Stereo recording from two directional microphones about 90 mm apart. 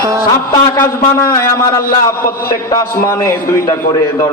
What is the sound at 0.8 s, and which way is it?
A man's voice, 30° left (ahead or behind).